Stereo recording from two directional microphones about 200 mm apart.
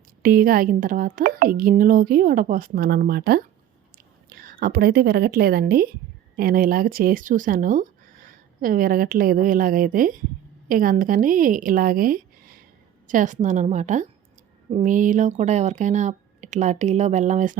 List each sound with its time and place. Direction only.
0.2 s a woman's voice: 45° right (ahead or behind)